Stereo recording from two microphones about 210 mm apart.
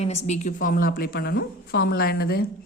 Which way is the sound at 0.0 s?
30° left (ahead or behind).